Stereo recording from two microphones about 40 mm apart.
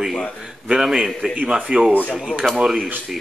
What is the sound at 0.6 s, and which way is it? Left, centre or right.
Speech, centre.